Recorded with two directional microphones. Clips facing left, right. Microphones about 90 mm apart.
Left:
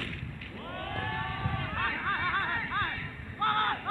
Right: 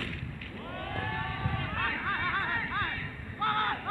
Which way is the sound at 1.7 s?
35° left (ahead or behind).